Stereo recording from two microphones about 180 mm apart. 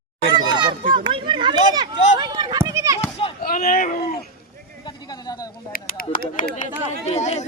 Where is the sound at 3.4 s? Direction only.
55° left (ahead or behind).